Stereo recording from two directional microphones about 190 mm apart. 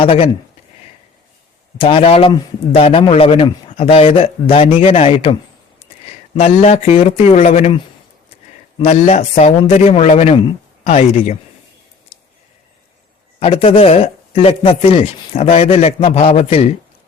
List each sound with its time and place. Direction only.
0.0 s a man's voice: 30° left (ahead or behind)
1.8 s a man's voice: 30° left (ahead or behind)
8.8 s speech: 35° left (ahead or behind)
13.4 s speech: 30° left (ahead or behind)